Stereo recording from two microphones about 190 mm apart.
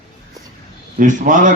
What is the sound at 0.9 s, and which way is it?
Speech, 45° right (ahead or behind).